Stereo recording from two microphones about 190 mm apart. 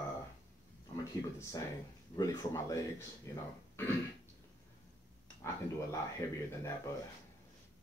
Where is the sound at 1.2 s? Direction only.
20° left (ahead or behind).